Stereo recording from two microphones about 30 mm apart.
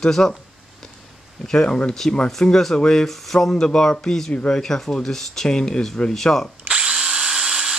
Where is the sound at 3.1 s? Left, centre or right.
Centre.